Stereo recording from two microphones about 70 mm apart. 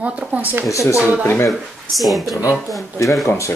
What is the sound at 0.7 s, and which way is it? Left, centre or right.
Speech, left.